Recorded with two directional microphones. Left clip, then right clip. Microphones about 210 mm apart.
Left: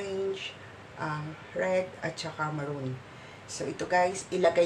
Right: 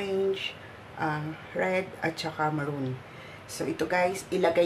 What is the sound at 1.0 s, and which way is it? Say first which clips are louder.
Speech: right 4 dB; 20° right (ahead or behind).